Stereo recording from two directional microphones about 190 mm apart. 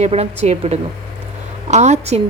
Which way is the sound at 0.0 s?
35° right (ahead or behind).